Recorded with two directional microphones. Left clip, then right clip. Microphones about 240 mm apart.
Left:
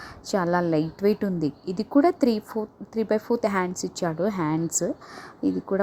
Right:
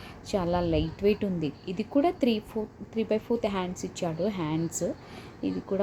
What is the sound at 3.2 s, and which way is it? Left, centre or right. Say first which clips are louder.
Speech: left 5 dB; left.